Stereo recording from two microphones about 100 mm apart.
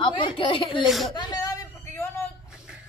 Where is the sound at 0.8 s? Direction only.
Centre (ahead or behind).